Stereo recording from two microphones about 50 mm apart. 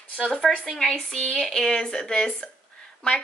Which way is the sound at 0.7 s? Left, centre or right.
Centre.